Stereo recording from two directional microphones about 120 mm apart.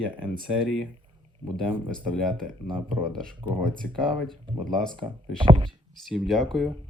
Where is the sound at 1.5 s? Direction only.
45° right (ahead or behind).